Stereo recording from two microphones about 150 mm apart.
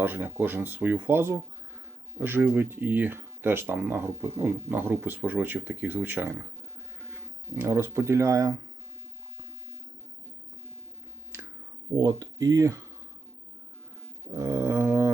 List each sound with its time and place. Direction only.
0.0 s speech: 10° right (ahead or behind)
11.3 s finger snapping: 15° right (ahead or behind)
11.9 s speech: 25° right (ahead or behind)
14.3 s a sound: 20° right (ahead or behind)